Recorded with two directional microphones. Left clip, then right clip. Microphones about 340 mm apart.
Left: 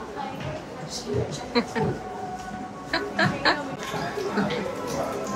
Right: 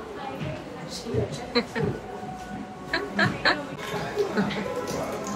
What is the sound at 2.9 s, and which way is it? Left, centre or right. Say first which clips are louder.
Music: left 1 dB; centre.